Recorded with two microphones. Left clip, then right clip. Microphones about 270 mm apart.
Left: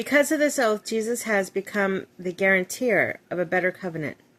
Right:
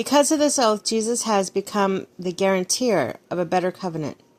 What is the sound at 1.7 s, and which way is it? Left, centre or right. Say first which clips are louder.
Speech: right 3 dB; right.